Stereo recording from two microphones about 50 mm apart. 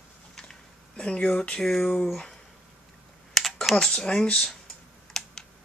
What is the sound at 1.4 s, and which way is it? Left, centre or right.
Speech, centre.